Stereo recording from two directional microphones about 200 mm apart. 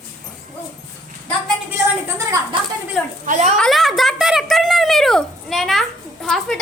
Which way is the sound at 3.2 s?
40° right (ahead or behind).